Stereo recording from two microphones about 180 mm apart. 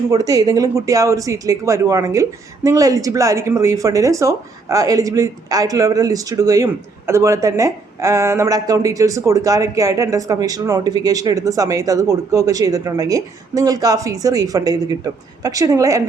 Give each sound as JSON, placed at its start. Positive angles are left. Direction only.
{"t": 0.1, "sound": "speech", "side_deg": -20}